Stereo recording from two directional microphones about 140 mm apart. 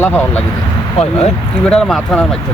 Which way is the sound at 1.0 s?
50° left (ahead or behind).